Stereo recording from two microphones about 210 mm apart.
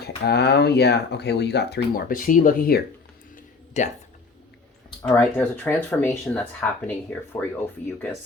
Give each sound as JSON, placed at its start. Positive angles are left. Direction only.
{"t": 0.0, "sound": "speech", "side_deg": 50}
{"t": 5.0, "sound": "speech", "side_deg": 10}